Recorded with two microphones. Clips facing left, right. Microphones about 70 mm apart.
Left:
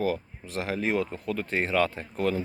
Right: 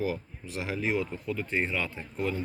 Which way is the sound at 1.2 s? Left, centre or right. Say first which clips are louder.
Left 2 dB; left.